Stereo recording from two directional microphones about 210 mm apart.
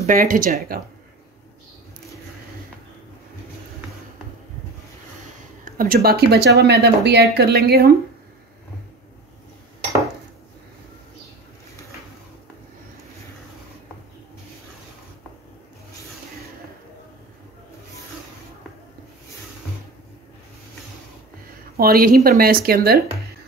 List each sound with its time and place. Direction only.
0.0 s speech: 40° right (ahead or behind)
5.7 s speech: 45° right (ahead or behind)
21.7 s speech: 45° right (ahead or behind)